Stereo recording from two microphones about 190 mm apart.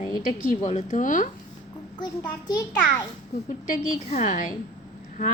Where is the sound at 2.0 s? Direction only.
20° left (ahead or behind).